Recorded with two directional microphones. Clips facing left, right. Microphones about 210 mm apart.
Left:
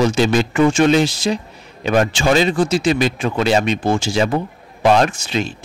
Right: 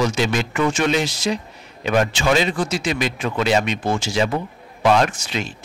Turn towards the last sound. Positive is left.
turn(degrees=30)  # may be behind; listen again after turning